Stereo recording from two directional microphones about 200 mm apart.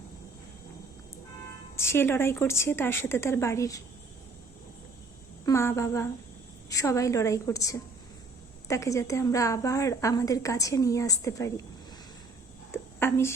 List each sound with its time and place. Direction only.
1.7 s a woman's voice: 10° left (ahead or behind)
5.5 s a woman's voice: 15° left (ahead or behind)
12.7 s a sound: 10° left (ahead or behind)